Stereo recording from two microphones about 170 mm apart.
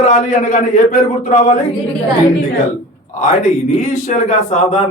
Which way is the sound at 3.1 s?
50° left (ahead or behind).